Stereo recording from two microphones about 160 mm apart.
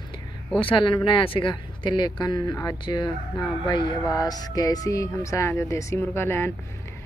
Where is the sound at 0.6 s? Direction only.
30° left (ahead or behind).